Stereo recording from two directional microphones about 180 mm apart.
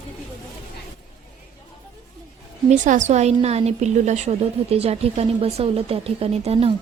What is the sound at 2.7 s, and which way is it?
A woman's voice, 45° right (ahead or behind).